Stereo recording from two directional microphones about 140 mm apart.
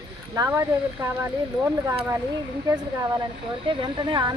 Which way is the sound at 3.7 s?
35° right (ahead or behind).